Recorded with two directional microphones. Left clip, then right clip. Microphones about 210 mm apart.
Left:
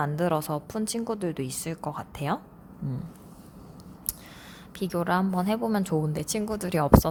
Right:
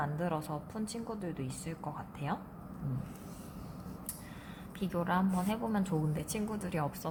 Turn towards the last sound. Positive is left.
turn(degrees=45)  # may be behind; listen again after turning